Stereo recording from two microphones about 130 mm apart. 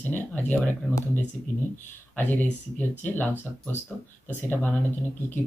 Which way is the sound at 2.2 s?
15° left (ahead or behind).